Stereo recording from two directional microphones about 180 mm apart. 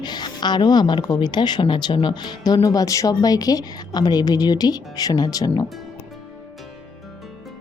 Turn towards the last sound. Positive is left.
turn(degrees=20)  # may be behind; listen again after turning